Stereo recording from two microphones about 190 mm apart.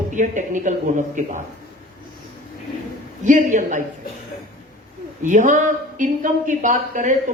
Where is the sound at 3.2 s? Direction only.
40° right (ahead or behind).